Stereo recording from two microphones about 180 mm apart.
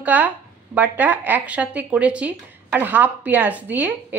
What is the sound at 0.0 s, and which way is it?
A woman's voice, 10° right (ahead or behind).